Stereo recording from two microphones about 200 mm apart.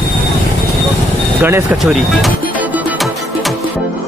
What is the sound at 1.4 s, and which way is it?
Music, 10° right (ahead or behind).